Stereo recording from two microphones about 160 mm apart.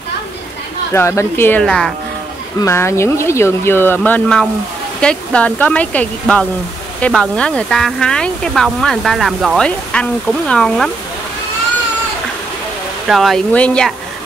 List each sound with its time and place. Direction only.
0.9 s speech: 15° left (ahead or behind)
1.6 s speech: 5° left (ahead or behind)
2.6 s speech: 15° left (ahead or behind)
13.1 s speech: centre (ahead or behind)